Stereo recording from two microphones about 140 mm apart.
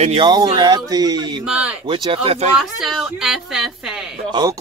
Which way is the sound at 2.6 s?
Centre (ahead or behind).